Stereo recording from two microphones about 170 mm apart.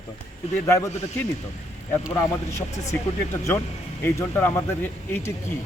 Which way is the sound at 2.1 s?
15° left (ahead or behind).